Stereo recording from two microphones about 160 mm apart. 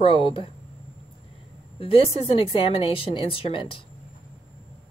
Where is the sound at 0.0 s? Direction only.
30° left (ahead or behind).